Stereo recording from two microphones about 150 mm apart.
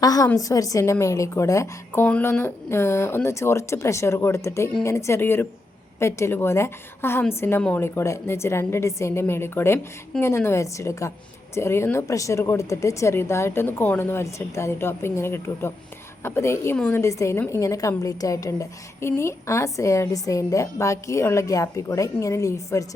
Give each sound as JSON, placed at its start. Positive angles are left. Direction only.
{"t": 0.0, "sound": "a woman's voice", "side_deg": 25}
{"t": 17.0, "sound": "a woman's voice", "side_deg": 20}